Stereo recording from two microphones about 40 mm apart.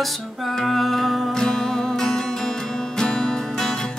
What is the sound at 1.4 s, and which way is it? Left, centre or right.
Music, centre.